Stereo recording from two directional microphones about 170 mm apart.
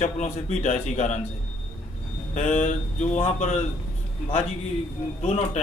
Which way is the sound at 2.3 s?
45° left (ahead or behind).